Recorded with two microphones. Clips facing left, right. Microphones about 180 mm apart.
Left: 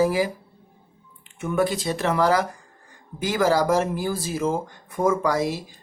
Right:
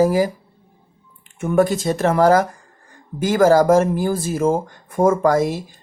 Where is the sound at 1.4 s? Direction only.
45° right (ahead or behind).